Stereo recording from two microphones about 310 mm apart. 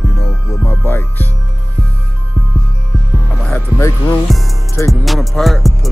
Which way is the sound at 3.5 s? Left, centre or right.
Centre.